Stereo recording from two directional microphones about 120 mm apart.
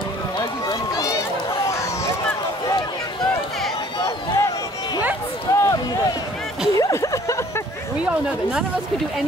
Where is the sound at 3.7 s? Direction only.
35° left (ahead or behind).